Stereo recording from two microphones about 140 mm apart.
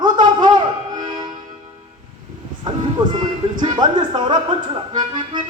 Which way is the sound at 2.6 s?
30° right (ahead or behind).